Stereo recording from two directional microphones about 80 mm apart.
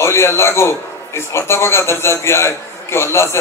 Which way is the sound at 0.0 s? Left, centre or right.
Left.